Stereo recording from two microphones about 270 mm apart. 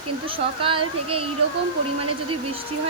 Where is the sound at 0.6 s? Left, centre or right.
Centre.